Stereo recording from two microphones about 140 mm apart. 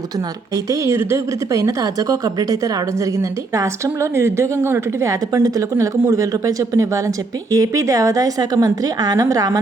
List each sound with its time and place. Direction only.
0.5 s a woman's voice: 20° right (ahead or behind)